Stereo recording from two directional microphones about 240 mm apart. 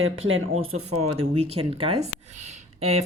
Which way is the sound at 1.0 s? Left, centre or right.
Right.